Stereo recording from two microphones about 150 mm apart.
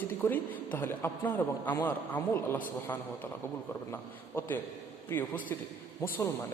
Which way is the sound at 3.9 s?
15° left (ahead or behind).